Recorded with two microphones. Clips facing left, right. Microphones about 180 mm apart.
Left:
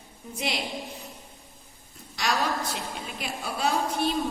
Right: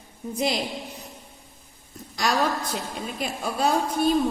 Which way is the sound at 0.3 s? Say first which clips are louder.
Right 6 dB; 35° right (ahead or behind).